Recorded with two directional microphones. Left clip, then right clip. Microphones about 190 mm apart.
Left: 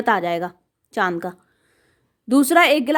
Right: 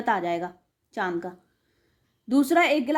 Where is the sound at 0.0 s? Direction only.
35° left (ahead or behind).